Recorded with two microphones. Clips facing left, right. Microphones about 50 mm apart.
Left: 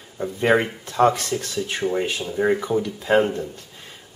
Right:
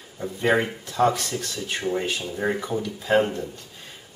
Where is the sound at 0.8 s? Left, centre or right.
Left.